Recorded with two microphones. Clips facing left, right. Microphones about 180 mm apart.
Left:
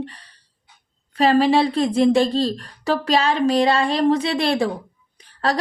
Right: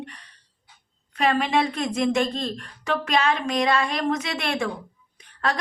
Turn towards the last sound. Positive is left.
turn(degrees=35)  # may be behind; listen again after turning